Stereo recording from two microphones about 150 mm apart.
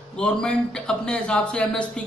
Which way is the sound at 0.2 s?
5° left (ahead or behind).